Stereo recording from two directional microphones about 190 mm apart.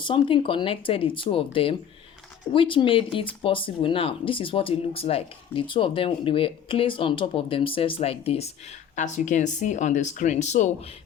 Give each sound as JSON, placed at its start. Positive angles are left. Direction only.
{"t": 0.0, "sound": "speech", "side_deg": 25}